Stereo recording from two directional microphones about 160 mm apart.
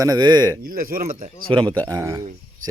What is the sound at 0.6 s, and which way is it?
Speech, 65° right (ahead or behind).